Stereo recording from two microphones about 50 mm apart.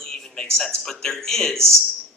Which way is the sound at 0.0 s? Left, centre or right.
Centre.